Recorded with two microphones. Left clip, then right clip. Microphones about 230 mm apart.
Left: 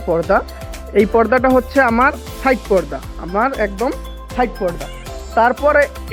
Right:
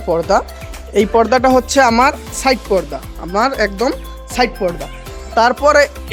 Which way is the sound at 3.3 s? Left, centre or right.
Centre.